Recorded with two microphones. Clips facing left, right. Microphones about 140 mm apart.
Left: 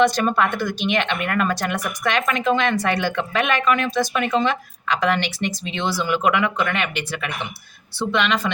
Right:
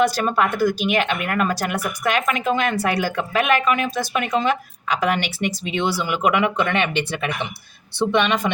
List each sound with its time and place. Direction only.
0.0 s speech: 5° right (ahead or behind)